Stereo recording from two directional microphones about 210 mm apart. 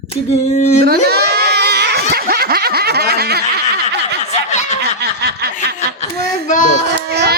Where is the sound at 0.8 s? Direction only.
50° right (ahead or behind).